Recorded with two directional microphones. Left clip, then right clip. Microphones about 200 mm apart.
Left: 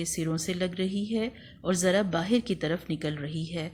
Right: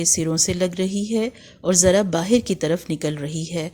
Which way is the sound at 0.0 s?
45° right (ahead or behind).